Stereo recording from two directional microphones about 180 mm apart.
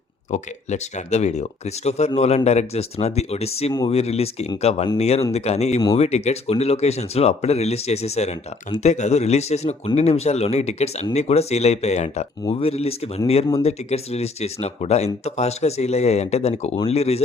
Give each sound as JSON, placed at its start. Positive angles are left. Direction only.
{"t": 0.3, "sound": "speech", "side_deg": 40}
{"t": 3.7, "sound": "speech", "side_deg": 20}
{"t": 3.9, "sound": "speech", "side_deg": 35}